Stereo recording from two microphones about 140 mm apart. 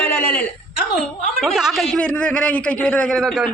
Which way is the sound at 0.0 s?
15° left (ahead or behind).